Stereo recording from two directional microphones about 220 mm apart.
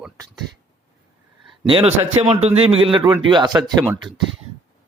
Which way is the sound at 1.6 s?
25° right (ahead or behind).